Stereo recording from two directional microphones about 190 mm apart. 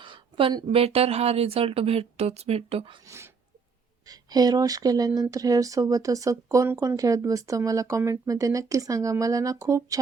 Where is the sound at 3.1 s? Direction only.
15° right (ahead or behind).